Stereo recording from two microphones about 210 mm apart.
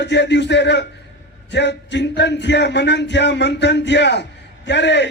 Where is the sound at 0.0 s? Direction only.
55° left (ahead or behind).